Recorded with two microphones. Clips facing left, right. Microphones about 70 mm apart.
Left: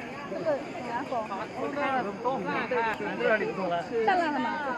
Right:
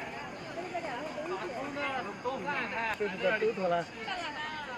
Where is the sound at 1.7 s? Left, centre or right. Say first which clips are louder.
Left 7 dB; left.